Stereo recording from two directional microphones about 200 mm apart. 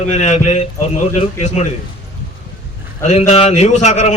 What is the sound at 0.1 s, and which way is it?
A man's voice, 35° left (ahead or behind).